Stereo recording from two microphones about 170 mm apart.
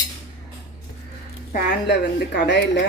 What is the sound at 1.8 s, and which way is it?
Speech, 75° left (ahead or behind).